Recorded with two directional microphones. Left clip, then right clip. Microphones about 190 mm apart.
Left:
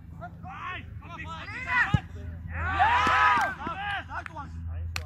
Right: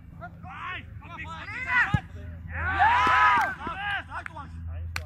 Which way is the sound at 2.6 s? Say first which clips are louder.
Right 2 dB; 25° left (ahead or behind).